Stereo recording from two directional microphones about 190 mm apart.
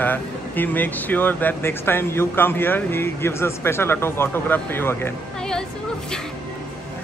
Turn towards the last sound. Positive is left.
turn(degrees=5)  # may be behind; listen again after turning